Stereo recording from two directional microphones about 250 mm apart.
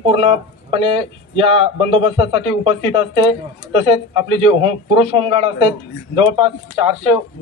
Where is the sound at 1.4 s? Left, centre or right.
Right.